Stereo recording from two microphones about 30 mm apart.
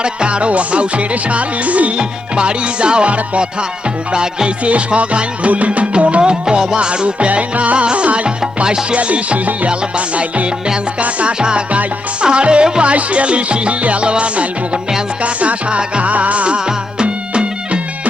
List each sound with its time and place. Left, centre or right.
0.0 s music: right
2.0 s music: right
4.1 s music: right
4.6 s music: right
6.4 s music: right
6.7 s music: right
7.3 s music: right
8.6 s music: right
9.0 s music: right
11.3 s music: right
16.6 s music: right